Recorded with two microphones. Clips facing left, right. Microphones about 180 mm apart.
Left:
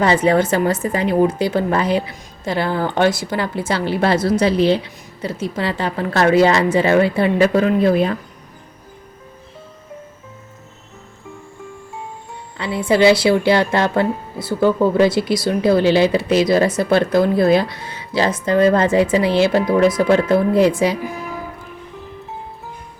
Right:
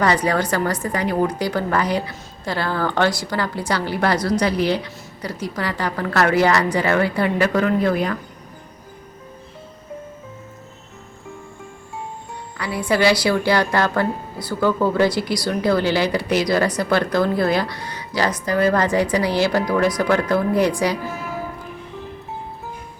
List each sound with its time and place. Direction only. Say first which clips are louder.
0.0 s speech: left 4 dB; 25° left (ahead or behind)
12.5 s speech: left 4 dB; 25° left (ahead or behind)